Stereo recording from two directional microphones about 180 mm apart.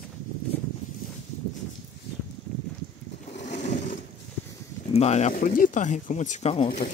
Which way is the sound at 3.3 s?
40° left (ahead or behind).